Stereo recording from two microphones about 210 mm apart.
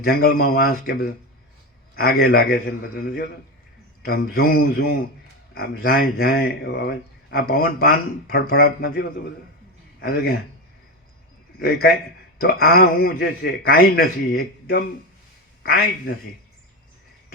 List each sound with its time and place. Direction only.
0.0 s speech: 50° left (ahead or behind)
2.0 s speech: 45° left (ahead or behind)
11.6 s speech: 45° left (ahead or behind)